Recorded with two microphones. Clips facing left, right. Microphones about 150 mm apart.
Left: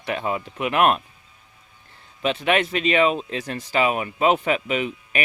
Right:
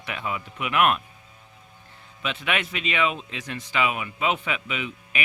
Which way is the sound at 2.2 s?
35° left (ahead or behind).